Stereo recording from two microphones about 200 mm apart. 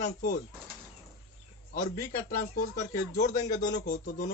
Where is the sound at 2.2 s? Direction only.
40° left (ahead or behind).